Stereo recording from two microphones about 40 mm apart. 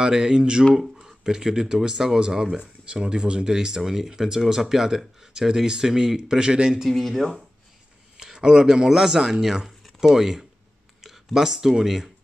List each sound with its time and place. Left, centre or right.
0.0 s speech: centre
6.9 s speech: centre
8.2 s speech: centre